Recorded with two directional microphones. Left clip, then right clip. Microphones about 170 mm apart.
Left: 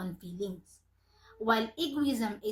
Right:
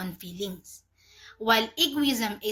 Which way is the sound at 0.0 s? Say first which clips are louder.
Right 3 dB; 10° right (ahead or behind).